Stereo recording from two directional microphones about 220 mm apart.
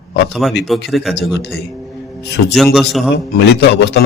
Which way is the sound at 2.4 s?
55° left (ahead or behind).